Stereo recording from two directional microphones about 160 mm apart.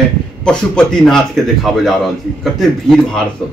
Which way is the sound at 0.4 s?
5° left (ahead or behind).